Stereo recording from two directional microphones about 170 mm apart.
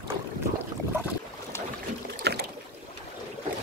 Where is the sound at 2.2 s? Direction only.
75° right (ahead or behind).